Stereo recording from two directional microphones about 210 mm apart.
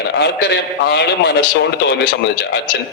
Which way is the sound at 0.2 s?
55° left (ahead or behind).